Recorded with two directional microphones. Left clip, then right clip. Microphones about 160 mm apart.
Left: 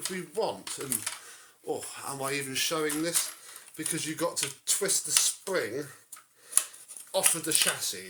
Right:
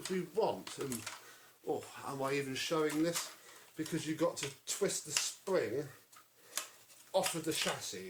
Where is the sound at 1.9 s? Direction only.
20° left (ahead or behind).